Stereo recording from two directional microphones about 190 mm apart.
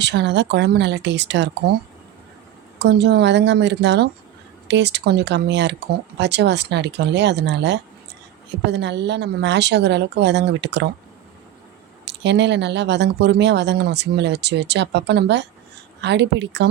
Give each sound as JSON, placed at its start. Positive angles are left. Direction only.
{"t": 0.0, "sound": "speech", "side_deg": -65}
{"t": 2.7, "sound": "speech", "side_deg": -65}
{"t": 12.0, "sound": "a woman's voice", "side_deg": -65}